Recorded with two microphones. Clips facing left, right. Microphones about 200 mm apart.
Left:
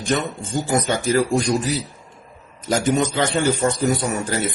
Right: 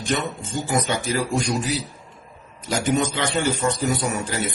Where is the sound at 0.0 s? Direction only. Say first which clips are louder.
Left 3 dB; 50° left (ahead or behind).